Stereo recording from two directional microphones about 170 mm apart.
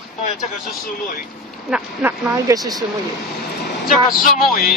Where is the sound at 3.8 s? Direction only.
55° left (ahead or behind).